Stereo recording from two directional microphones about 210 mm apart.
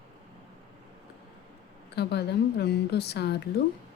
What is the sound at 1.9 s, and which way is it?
A woman's voice, 50° left (ahead or behind).